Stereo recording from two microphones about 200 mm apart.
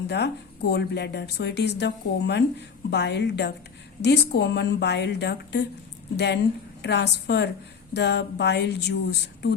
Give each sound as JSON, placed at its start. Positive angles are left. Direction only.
{"t": 0.1, "sound": "a woman's voice", "side_deg": 55}